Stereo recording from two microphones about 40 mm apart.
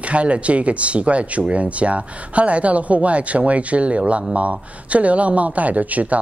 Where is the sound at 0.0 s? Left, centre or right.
Right.